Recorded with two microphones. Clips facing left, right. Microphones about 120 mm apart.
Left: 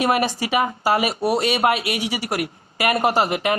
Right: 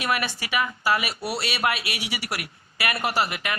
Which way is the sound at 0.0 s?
40° left (ahead or behind).